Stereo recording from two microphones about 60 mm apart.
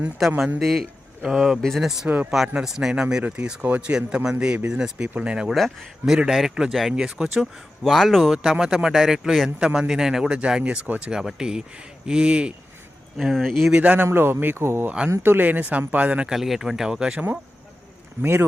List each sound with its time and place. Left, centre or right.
0.3 s a man's voice: centre
0.6 s a man's voice: centre
5.5 s speech: centre
6.5 s a man's voice: centre
7.9 s a man's voice: centre
11.0 s a man's voice: centre
13.1 s speech: centre
13.7 s speech: right
14.1 s speech: right
14.8 s speech: centre
15.2 s speech: right
16.3 s a man's voice: centre
18.2 s speech: right